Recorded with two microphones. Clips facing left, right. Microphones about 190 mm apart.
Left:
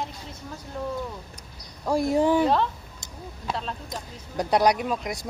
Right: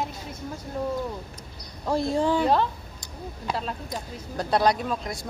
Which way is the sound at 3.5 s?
5° right (ahead or behind).